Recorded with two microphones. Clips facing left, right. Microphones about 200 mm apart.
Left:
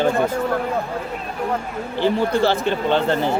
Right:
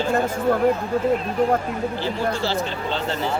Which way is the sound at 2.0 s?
60° left (ahead or behind).